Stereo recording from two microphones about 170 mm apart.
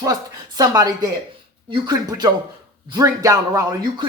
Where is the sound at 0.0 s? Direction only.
20° right (ahead or behind).